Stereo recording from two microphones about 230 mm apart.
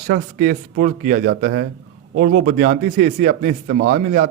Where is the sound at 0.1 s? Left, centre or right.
Right.